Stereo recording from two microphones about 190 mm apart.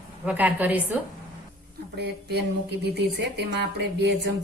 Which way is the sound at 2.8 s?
60° right (ahead or behind).